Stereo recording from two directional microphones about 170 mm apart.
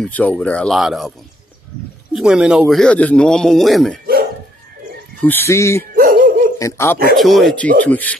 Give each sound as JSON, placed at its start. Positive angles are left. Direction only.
{"t": 0.0, "sound": "a man's voice", "side_deg": 10}
{"t": 2.1, "sound": "a man's voice", "side_deg": -5}
{"t": 5.2, "sound": "speech", "side_deg": 15}
{"t": 5.9, "sound": "dog", "side_deg": -55}
{"t": 6.6, "sound": "speech", "side_deg": 15}
{"t": 7.2, "sound": "a man's voice", "side_deg": 0}